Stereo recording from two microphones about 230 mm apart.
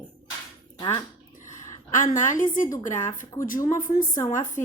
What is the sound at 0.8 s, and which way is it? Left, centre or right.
Speech, centre.